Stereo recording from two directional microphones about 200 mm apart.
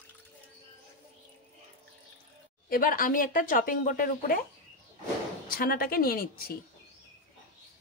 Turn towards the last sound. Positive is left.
turn(degrees=50)  # may be behind; listen again after turning